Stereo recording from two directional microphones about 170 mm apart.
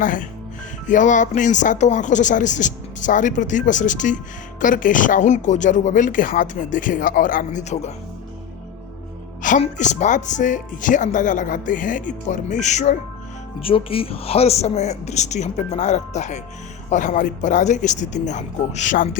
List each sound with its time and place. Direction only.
0.0 s speech: 50° left (ahead or behind)
9.4 s speech: 45° left (ahead or behind)
13.6 s speech: 35° left (ahead or behind)